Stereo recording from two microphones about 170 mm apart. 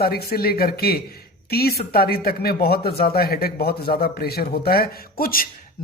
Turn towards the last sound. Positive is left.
turn(degrees=60)  # may be behind; listen again after turning